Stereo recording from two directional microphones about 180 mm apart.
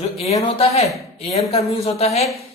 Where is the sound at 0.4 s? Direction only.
35° left (ahead or behind).